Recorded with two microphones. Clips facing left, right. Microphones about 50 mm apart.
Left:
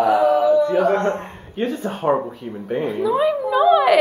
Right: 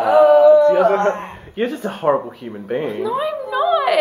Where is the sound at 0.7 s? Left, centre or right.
Right.